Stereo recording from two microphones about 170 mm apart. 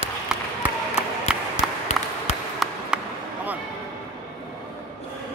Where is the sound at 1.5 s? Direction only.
40° left (ahead or behind).